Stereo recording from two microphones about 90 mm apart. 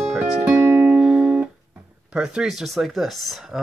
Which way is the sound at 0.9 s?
10° right (ahead or behind).